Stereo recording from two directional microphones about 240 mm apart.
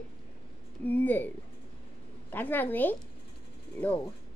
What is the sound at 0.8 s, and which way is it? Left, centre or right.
Speech, centre.